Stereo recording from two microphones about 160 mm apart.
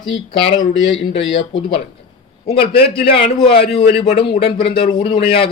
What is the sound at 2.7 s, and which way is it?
Speech, 80° left.